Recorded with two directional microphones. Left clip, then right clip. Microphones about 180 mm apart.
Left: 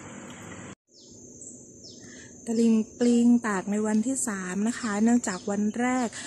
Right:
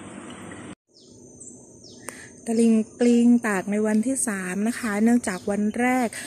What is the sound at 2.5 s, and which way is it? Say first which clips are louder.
A woman's voice: right 4 dB; centre (ahead or behind).